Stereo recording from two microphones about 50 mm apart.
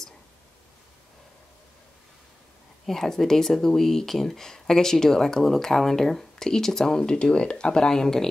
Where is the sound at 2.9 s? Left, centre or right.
Centre.